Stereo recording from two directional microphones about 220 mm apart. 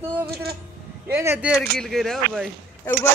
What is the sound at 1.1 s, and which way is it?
Speech, 10° right (ahead or behind).